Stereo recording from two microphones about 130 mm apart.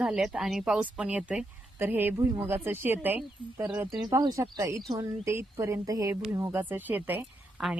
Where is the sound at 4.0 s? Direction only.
30° right (ahead or behind).